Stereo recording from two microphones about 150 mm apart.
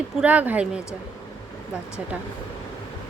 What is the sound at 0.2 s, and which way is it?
Speech, 10° right (ahead or behind).